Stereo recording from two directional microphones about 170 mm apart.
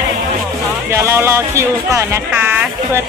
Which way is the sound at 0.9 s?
15° right (ahead or behind).